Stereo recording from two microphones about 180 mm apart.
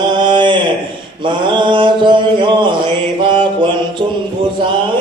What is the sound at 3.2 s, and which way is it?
Mantra, 25° right (ahead or behind).